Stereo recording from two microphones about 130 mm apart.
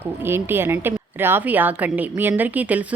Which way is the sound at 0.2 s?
15° right (ahead or behind).